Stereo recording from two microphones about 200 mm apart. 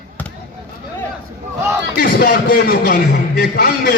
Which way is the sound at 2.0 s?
50° left (ahead or behind).